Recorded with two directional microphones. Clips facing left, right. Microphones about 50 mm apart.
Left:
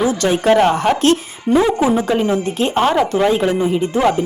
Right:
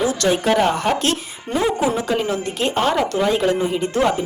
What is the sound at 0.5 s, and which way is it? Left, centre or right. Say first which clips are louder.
Speech: left 4 dB; left.